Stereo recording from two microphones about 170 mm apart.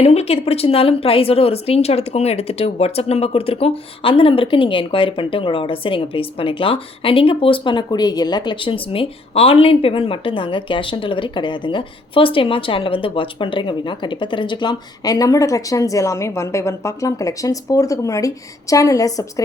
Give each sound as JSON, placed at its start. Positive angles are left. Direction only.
{"t": 0.0, "sound": "speech", "side_deg": 35}